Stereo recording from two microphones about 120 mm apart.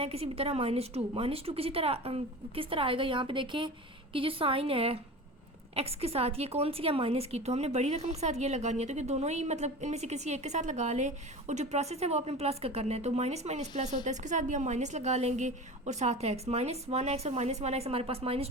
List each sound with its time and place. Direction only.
0.0 s a woman's voice: 55° right (ahead or behind)